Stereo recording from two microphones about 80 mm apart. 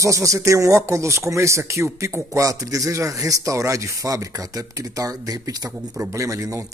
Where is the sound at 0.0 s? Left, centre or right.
Right.